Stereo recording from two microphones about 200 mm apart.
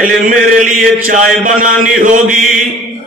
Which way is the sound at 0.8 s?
45° right (ahead or behind).